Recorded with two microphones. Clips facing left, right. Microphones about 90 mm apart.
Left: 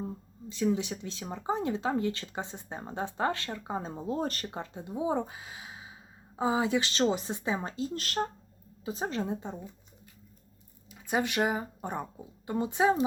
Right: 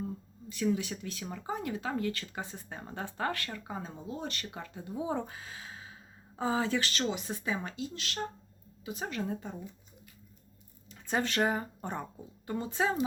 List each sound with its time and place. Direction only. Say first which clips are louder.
0.0 s speech: left 1 dB; 25° left (ahead or behind)
4.4 s speech: left 4 dB; 25° left (ahead or behind); by 8.2 s 45° left (ahead or behind)
8.8 s speech: left 3 dB; 30° left (ahead or behind)
10.9 s speech: left 2 dB; 10° left (ahead or behind)